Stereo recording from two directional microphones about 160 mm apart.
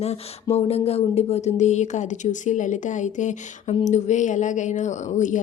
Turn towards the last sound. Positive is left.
turn(degrees=50)  # may be behind; listen again after turning